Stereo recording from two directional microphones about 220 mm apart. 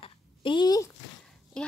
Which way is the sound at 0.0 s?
20° left (ahead or behind).